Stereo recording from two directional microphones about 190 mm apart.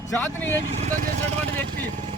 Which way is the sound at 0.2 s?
10° left (ahead or behind).